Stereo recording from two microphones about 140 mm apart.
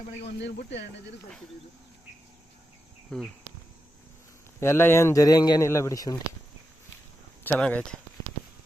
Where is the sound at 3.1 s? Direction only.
5° left (ahead or behind).